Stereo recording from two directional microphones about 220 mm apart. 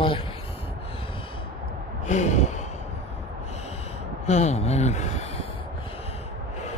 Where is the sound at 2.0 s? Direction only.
30° left (ahead or behind).